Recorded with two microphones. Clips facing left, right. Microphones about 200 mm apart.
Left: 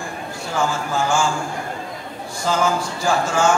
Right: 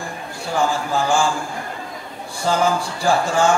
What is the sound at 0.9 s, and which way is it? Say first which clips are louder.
Speech: right 1 dB; 35° right (ahead or behind).